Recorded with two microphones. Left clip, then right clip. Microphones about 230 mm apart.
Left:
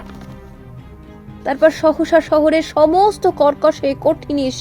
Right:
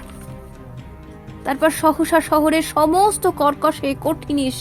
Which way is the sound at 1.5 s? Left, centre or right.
Right.